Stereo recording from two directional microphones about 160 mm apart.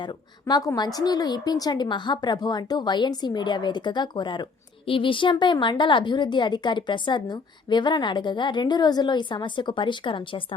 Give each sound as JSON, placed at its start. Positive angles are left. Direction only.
{"t": 0.0, "sound": "a woman's voice", "side_deg": 25}